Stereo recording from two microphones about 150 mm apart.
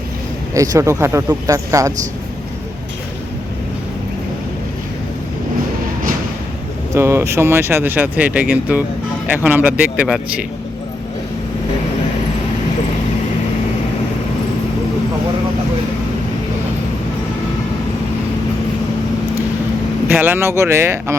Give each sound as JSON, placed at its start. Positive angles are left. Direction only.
{"t": 0.5, "sound": "speech", "side_deg": -20}
{"t": 6.9, "sound": "speech", "side_deg": -15}
{"t": 20.1, "sound": "speech", "side_deg": -15}